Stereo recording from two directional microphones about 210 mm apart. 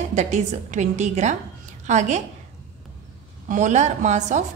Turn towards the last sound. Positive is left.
turn(degrees=-35)  # may be behind; listen again after turning